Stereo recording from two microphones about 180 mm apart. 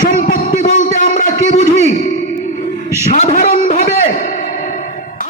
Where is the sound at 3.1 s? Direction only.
40° left (ahead or behind).